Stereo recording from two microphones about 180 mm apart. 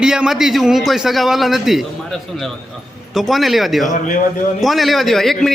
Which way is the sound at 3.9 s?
45° left (ahead or behind).